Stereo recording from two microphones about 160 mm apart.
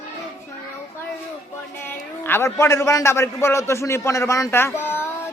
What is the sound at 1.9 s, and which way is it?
A man's voice, 15° left (ahead or behind).